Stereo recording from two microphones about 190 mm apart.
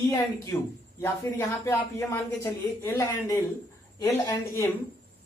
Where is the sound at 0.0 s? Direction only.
15° left (ahead or behind).